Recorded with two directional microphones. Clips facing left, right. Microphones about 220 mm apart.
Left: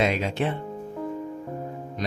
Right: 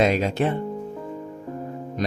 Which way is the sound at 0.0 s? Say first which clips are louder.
Right 4 dB; 40° right (ahead or behind).